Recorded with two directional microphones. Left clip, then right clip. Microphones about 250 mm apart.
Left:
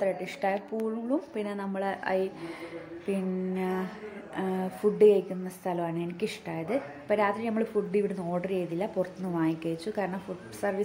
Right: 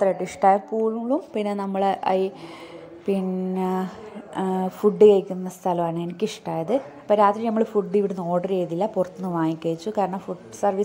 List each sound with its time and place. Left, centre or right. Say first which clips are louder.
0.0 s a woman's voice: right 10 dB; centre